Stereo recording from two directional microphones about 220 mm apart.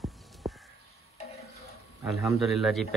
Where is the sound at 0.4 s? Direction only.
Centre (ahead or behind).